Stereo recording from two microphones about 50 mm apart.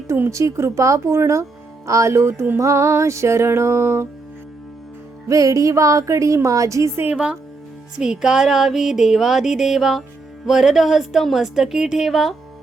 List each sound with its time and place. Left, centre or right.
0.3 s speech: right
1.9 s music: right
2.6 s music: right
5.3 s speech: right
7.9 s music: centre